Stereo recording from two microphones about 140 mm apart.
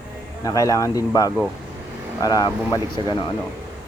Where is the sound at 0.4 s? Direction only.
25° left (ahead or behind).